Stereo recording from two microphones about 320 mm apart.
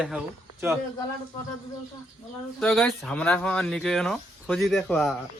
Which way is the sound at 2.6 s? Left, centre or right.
Centre.